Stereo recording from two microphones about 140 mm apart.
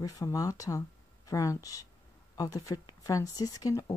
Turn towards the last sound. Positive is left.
turn(degrees=25)  # may be behind; listen again after turning